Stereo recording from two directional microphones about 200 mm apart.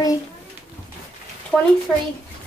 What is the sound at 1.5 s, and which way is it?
Speech, centre (ahead or behind).